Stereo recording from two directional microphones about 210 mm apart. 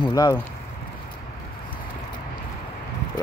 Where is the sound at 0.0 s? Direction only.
15° left (ahead or behind).